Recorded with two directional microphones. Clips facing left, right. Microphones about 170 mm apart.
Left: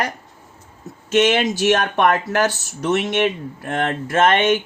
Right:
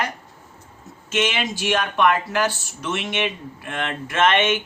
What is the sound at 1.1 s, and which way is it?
Speech, 45° left (ahead or behind).